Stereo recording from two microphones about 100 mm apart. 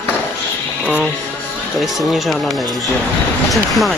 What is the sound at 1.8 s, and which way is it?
Speech, centre (ahead or behind).